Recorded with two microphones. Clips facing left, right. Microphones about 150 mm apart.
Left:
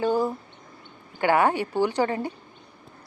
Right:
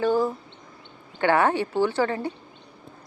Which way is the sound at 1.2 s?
15° left (ahead or behind).